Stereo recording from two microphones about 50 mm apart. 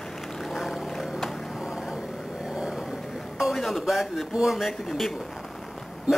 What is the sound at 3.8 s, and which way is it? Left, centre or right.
A man's voice, centre.